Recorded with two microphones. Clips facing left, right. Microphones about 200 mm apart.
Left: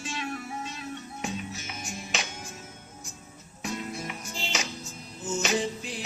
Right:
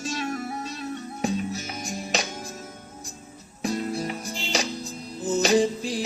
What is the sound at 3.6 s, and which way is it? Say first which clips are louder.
Music: right 7 dB; 35° right (ahead or behind).